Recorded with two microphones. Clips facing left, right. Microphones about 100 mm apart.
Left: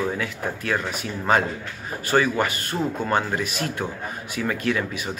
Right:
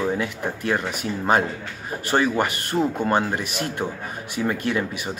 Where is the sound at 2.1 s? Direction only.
20° right (ahead or behind).